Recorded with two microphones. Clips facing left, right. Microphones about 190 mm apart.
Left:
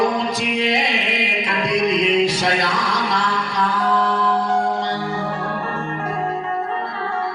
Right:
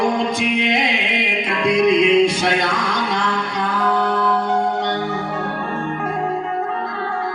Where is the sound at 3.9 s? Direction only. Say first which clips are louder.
Right 2 dB; 35° right (ahead or behind).